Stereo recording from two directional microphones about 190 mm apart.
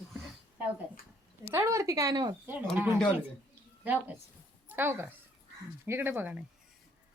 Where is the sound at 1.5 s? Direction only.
15° right (ahead or behind).